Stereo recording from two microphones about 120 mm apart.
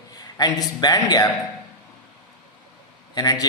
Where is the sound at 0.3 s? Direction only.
35° left (ahead or behind).